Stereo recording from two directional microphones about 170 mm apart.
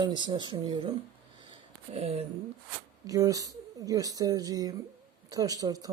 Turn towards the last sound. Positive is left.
turn(degrees=-20)  # may be behind; listen again after turning